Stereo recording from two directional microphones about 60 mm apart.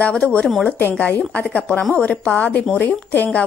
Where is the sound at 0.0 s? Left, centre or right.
Centre.